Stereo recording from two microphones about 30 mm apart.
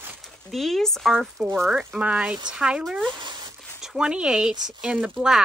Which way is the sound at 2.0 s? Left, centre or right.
Right.